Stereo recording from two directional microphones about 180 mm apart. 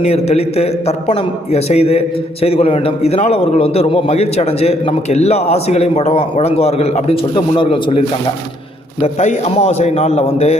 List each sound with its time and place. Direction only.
0.0 s a man's voice: 35° left (ahead or behind)